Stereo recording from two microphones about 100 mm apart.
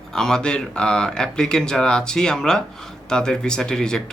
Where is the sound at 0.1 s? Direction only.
5° left (ahead or behind).